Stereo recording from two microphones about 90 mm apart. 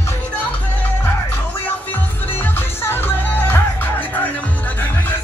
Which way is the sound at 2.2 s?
25° left (ahead or behind).